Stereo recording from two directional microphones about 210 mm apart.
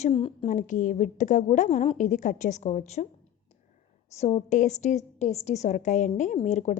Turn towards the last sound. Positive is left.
turn(degrees=35)  # may be behind; listen again after turning